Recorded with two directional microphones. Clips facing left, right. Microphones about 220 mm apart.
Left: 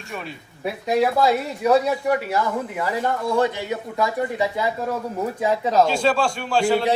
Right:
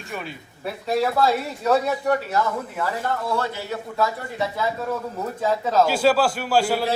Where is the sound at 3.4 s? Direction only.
15° left (ahead or behind).